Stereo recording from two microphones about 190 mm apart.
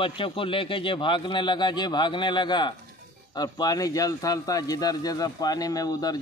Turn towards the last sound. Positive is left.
turn(degrees=20)  # may be behind; listen again after turning